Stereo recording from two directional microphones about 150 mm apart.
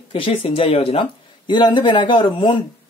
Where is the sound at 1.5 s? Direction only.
30° left (ahead or behind).